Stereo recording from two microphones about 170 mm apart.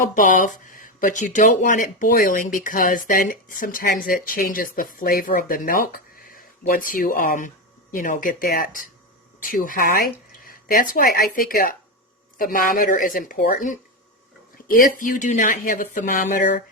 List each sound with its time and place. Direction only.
0.0 s speech: 50° left (ahead or behind)